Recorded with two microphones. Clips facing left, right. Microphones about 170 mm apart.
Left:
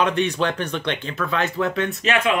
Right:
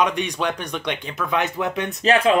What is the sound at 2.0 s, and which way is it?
Speech, 35° right (ahead or behind).